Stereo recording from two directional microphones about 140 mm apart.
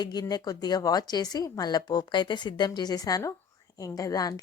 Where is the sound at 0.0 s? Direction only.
30° left (ahead or behind).